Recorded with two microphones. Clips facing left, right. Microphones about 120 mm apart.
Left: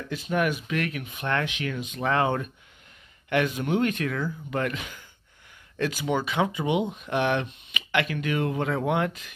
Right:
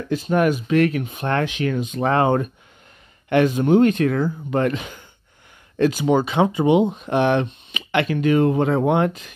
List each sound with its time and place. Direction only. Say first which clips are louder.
0.1 s speech: right 7 dB; 35° right (ahead or behind)